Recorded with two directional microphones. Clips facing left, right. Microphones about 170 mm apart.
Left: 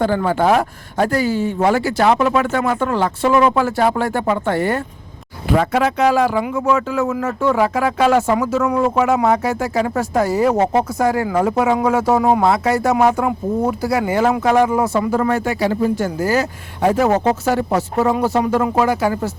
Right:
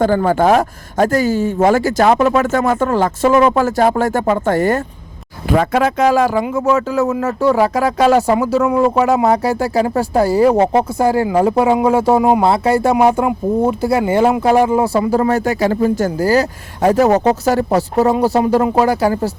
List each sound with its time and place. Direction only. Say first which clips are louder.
0.0 s speech: right 3 dB; 45° right (ahead or behind)
15.3 s speech: right 3 dB; 40° right (ahead or behind)